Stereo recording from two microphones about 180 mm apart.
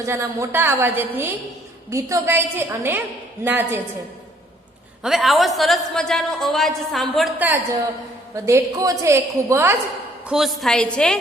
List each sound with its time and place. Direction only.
0.0 s a woman's voice: 15° right (ahead or behind)
5.0 s a woman's voice: centre (ahead or behind)
10.2 s a woman's voice: centre (ahead or behind)